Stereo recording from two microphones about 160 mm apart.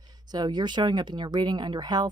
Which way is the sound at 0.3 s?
25° right (ahead or behind).